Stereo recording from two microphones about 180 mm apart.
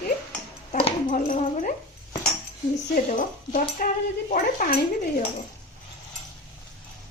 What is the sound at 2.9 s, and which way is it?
Speech, 50° left (ahead or behind).